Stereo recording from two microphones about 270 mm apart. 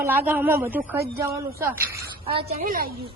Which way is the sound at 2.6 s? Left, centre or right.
Right.